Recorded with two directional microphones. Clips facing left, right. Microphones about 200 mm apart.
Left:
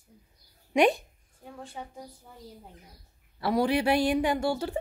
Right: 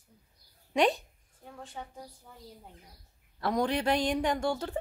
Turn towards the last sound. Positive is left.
turn(degrees=10)  # may be behind; listen again after turning